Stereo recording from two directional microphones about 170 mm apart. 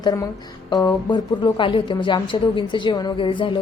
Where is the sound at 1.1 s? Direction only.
30° left (ahead or behind).